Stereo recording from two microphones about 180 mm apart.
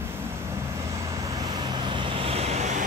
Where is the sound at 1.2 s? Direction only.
20° right (ahead or behind); by 2.8 s 40° right (ahead or behind).